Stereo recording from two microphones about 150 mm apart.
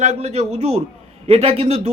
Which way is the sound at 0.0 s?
45° right (ahead or behind).